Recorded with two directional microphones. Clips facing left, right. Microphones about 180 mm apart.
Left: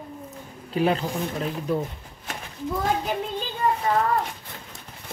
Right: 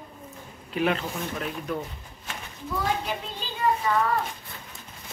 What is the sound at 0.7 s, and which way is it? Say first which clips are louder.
Speech: left 3 dB; 35° left (ahead or behind).